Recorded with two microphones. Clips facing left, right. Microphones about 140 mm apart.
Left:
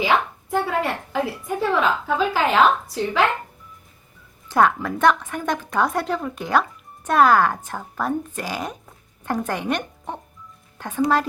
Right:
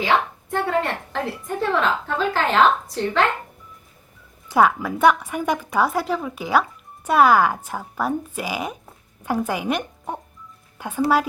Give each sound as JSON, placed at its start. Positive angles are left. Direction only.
{"t": 0.5, "sound": "a woman's voice", "side_deg": 5}
{"t": 4.4, "sound": "a woman's voice", "side_deg": -5}
{"t": 10.8, "sound": "music", "side_deg": -10}